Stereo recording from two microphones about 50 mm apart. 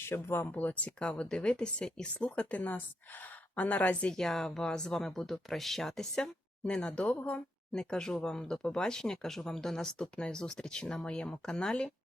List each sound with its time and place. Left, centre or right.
0.1 s speech: left
0.5 s speech: left
4.1 s speech: centre